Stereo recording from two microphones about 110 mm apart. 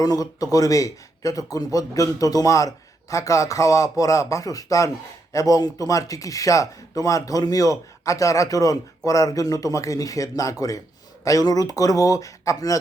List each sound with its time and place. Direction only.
0.0 s speech: 35° left (ahead or behind)